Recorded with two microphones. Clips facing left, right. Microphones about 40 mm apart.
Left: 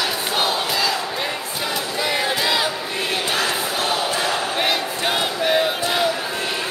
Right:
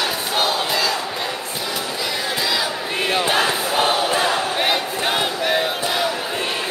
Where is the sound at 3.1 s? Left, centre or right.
Right.